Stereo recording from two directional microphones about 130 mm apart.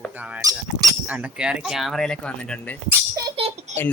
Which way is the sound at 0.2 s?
10° right (ahead or behind).